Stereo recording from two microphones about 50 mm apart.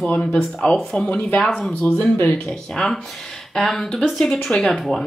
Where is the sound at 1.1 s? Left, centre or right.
Left.